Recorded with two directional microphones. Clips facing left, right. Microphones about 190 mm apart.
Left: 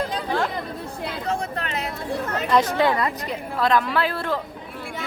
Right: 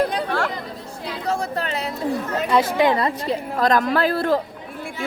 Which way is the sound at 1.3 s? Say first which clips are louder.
Right 4 dB; 35° right (ahead or behind).